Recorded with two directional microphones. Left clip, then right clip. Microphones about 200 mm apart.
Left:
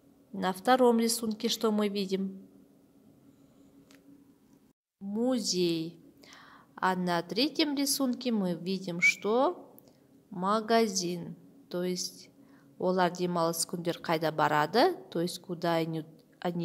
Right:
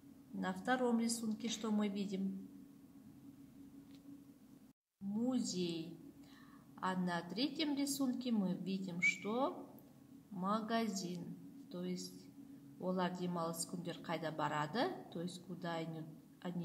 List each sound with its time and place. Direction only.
0.4 s a woman's voice: 45° left (ahead or behind)
5.1 s a woman's voice: 50° left (ahead or behind)